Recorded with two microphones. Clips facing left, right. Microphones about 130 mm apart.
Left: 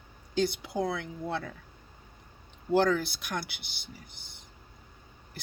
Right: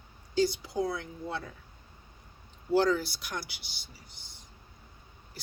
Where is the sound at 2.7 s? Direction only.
55° left (ahead or behind).